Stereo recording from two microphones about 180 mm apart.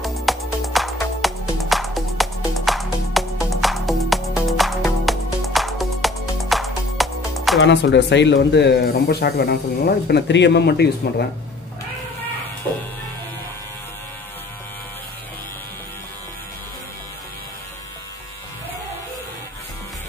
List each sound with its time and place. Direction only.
0.0 s music: centre (ahead or behind)
7.6 s speech: 80° left